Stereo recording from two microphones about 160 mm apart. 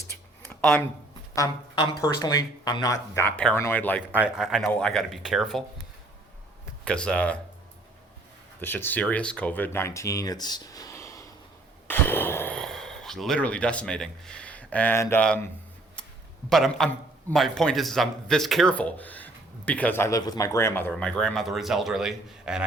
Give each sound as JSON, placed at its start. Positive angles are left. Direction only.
{"t": 0.1, "sound": "a sound", "side_deg": 15}
{"t": 0.4, "sound": "a sound", "side_deg": 0}
{"t": 1.4, "sound": "speech", "side_deg": 30}
{"t": 3.2, "sound": "speech", "side_deg": 10}
{"t": 4.1, "sound": "a man's voice", "side_deg": -5}
{"t": 6.8, "sound": "speech", "side_deg": 5}
{"t": 8.6, "sound": "speech", "side_deg": 10}
{"t": 16.5, "sound": "a man's voice", "side_deg": 5}